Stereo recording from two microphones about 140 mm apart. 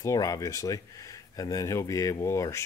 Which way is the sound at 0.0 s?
25° left (ahead or behind).